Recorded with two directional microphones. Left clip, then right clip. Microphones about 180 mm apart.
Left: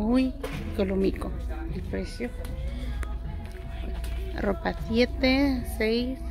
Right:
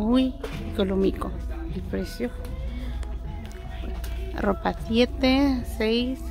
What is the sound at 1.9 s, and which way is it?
Speech, 25° right (ahead or behind).